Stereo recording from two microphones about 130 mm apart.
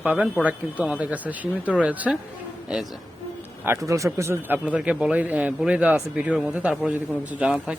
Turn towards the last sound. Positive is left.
turn(degrees=-5)  # may be behind; listen again after turning